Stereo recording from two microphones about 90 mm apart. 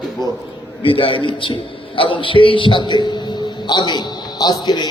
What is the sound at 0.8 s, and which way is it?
A man's voice, 75° left (ahead or behind).